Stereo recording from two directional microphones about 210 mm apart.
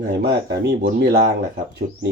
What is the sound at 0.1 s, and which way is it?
Speech, 50° right (ahead or behind).